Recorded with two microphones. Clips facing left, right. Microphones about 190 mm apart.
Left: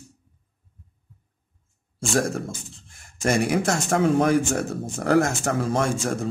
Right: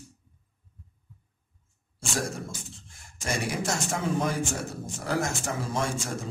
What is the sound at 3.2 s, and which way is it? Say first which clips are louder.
Speech: left 9 dB; 55° left (ahead or behind).